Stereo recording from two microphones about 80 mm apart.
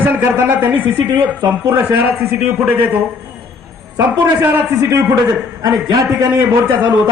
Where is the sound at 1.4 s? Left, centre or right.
Right.